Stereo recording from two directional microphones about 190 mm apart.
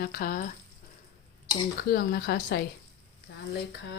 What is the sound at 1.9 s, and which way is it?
Speech, 55° left (ahead or behind).